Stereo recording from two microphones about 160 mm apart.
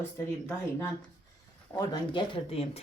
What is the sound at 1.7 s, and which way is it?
Speech, 25° left (ahead or behind).